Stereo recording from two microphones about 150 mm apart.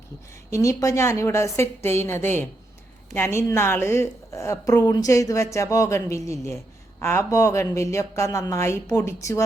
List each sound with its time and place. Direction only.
0.5 s a woman's voice: 20° left (ahead or behind)